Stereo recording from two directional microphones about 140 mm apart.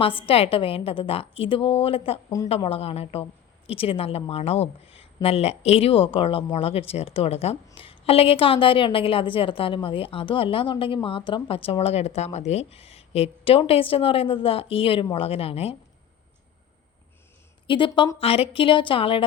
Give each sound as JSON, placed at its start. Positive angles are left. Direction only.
{"t": 0.3, "sound": "speech", "side_deg": 45}
{"t": 17.7, "sound": "a woman's voice", "side_deg": 35}